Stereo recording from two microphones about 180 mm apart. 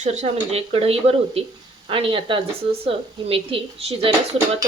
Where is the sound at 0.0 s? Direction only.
40° right (ahead or behind).